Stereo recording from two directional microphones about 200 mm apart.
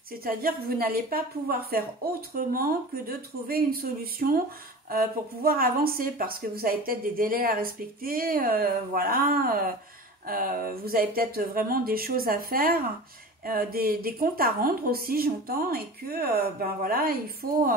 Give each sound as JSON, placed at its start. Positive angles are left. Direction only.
{"t": 0.2, "sound": "speech", "side_deg": -50}